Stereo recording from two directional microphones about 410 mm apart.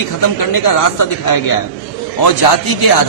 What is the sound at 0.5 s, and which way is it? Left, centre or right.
A man's voice, left.